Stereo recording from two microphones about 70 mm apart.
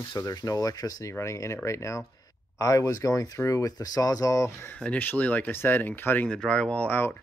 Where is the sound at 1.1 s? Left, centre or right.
Left.